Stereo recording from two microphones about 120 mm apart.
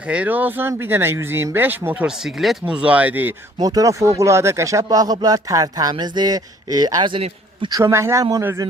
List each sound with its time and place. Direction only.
0.1 s speech: 10° right (ahead or behind)
2.0 s speech: 5° right (ahead or behind)
3.6 s speech: 30° right (ahead or behind)
7.7 s speech: 25° right (ahead or behind)